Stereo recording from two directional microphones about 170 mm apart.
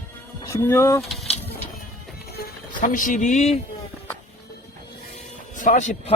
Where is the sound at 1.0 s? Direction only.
Centre (ahead or behind).